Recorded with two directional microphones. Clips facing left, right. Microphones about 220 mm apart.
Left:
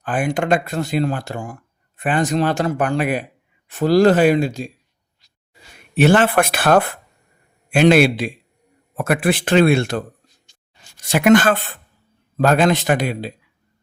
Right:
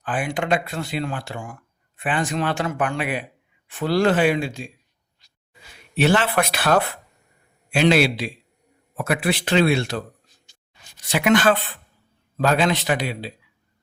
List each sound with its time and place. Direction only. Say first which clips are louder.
0.0 s speech: left 5 dB; 45° left (ahead or behind)
5.9 s speech: left 5 dB; 50° left (ahead or behind)
11.0 s speech: left 5 dB; 45° left (ahead or behind)